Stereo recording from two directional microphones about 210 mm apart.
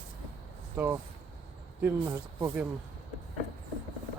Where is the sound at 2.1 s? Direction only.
10° right (ahead or behind).